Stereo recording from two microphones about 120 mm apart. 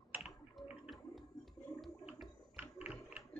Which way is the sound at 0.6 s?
Centre (ahead or behind).